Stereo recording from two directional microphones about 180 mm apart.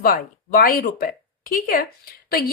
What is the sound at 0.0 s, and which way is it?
A woman's voice, 55° left (ahead or behind).